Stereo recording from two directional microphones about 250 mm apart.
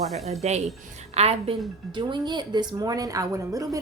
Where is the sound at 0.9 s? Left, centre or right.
Right.